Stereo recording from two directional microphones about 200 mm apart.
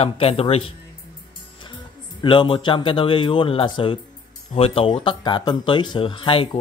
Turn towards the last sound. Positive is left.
turn(degrees=25)  # may be behind; listen again after turning